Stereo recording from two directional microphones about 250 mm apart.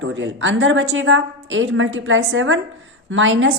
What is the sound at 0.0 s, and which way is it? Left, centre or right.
A woman's voice, right.